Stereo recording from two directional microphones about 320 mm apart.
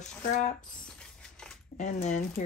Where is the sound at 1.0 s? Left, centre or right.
Centre.